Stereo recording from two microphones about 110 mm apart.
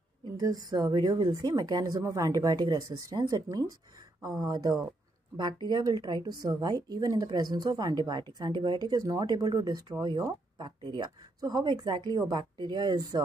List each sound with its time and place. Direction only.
0.4 s speech: 35° right (ahead or behind)